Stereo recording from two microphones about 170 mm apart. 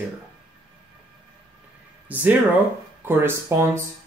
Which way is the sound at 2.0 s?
10° right (ahead or behind).